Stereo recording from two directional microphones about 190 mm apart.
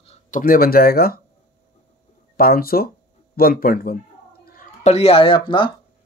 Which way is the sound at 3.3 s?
50° left (ahead or behind).